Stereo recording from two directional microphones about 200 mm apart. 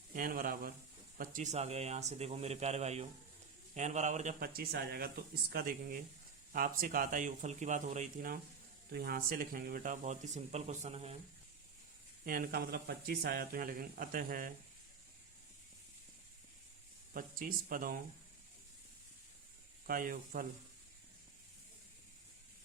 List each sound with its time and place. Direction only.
0.1 s speech: 45° right (ahead or behind)
12.2 s speech: 45° right (ahead or behind)
17.2 s speech: 45° right (ahead or behind)
19.9 s speech: 45° right (ahead or behind)